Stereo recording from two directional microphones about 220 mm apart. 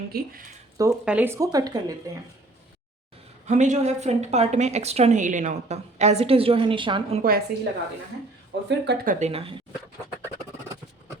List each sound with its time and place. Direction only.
0.1 s speech: 45° right (ahead or behind)
0.8 s speech: 10° right (ahead or behind)
3.4 s speech: 30° right (ahead or behind)
7.2 s speech: 40° right (ahead or behind)
8.8 s speech: 50° right (ahead or behind)
9.1 s speech: 30° right (ahead or behind)